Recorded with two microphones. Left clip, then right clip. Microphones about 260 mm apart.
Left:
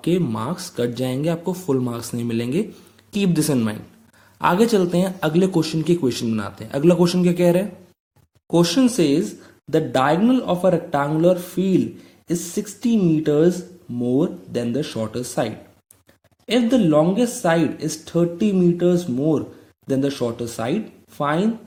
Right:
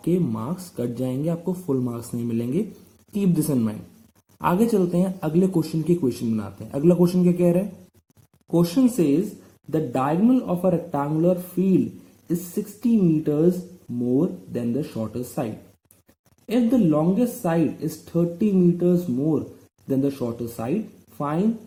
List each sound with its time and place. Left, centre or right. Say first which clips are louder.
0.0 s speech: left 3 dB; left
8.6 s speech: left 2 dB; left
13.0 s speech: left 5 dB; left
16.5 s speech: left 3 dB; left
19.9 s speech: left 3 dB; left